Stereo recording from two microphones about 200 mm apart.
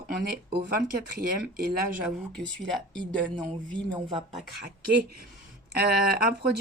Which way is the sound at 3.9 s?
30° right (ahead or behind).